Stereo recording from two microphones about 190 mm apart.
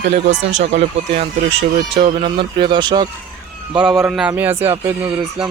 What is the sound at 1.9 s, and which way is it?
Speech, 30° right (ahead or behind).